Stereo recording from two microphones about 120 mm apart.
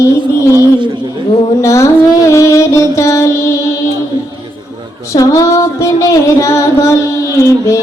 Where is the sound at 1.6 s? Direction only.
25° left (ahead or behind).